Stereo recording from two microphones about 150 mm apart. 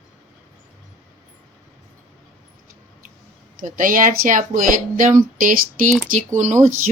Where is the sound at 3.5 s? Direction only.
60° right (ahead or behind).